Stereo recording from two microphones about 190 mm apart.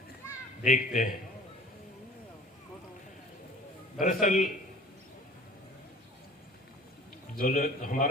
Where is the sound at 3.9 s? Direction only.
45° left (ahead or behind).